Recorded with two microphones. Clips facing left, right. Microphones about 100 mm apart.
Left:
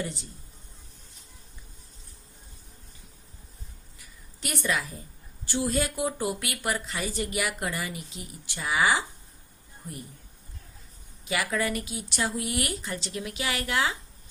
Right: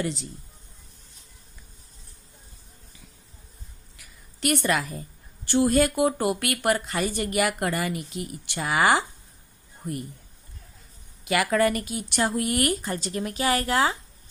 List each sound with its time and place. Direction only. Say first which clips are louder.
0.0 s speech: right 5 dB; 90° right
3.9 s a sound: even; 60° right (ahead or behind)
5.5 s a woman's voice: right 7 dB; 60° right (ahead or behind)
9.8 s speech: right 9 dB; 70° right (ahead or behind)
11.3 s speech: right 6 dB; 60° right (ahead or behind); by 13.9 s 40° right (ahead or behind)